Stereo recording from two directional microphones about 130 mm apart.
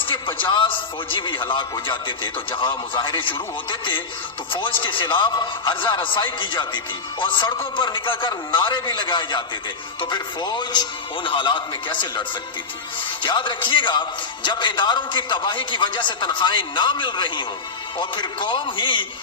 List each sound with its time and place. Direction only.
0.0 s music: 40° left (ahead or behind)
0.4 s a man's voice: 40° left (ahead or behind)